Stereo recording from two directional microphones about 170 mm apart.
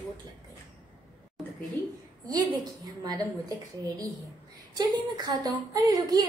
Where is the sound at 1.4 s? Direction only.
Centre (ahead or behind).